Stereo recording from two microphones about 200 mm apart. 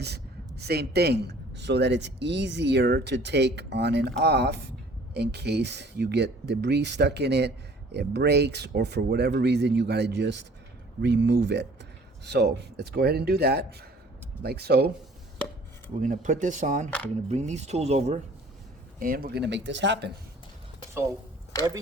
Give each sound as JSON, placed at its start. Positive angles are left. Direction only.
{"t": 0.0, "sound": "speech", "side_deg": -55}
{"t": 16.0, "sound": "speech", "side_deg": -40}
{"t": 18.9, "sound": "speech", "side_deg": -45}